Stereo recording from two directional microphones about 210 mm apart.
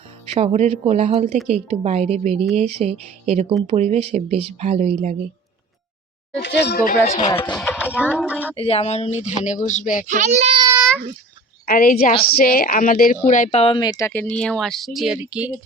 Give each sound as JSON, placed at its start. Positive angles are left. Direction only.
{"t": 0.3, "sound": "speech", "side_deg": -30}
{"t": 6.3, "sound": "speech", "side_deg": 55}
{"t": 7.0, "sound": "speech", "side_deg": 30}
{"t": 7.3, "sound": "speech", "side_deg": 20}
{"t": 7.5, "sound": "speech", "side_deg": 5}
{"t": 8.5, "sound": "speech", "side_deg": 30}
{"t": 10.1, "sound": "a child's voice", "side_deg": -35}
{"t": 11.6, "sound": "speech", "side_deg": 45}